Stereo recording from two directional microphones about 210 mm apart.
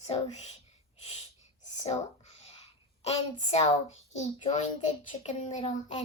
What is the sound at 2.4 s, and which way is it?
A woman's voice, 30° left (ahead or behind).